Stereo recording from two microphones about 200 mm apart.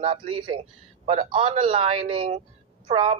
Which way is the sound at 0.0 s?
25° right (ahead or behind).